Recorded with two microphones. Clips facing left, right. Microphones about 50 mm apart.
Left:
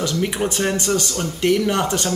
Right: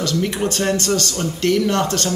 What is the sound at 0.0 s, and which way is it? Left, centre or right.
A man's voice, centre.